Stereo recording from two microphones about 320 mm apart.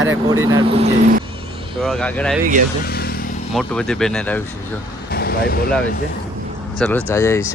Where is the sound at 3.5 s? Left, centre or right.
Centre.